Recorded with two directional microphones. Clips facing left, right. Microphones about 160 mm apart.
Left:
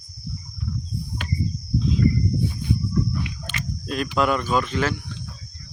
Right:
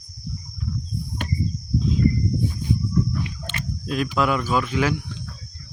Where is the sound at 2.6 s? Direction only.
40° right (ahead or behind).